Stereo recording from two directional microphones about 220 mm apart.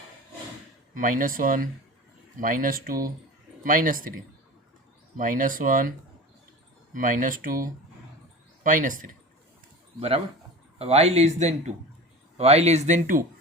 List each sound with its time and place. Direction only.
0.9 s speech: 40° right (ahead or behind)
5.1 s speech: 40° right (ahead or behind)
6.9 s speech: 35° right (ahead or behind)
10.8 s speech: 30° right (ahead or behind)